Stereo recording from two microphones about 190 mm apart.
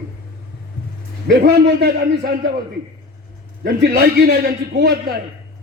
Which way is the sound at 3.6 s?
55° right (ahead or behind).